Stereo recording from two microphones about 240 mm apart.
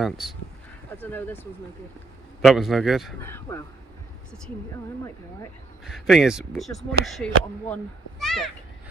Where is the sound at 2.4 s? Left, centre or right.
Centre.